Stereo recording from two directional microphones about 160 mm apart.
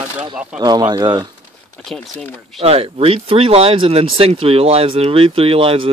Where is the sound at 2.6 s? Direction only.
40° right (ahead or behind).